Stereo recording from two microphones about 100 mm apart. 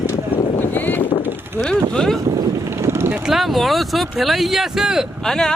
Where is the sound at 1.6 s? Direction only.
10° left (ahead or behind).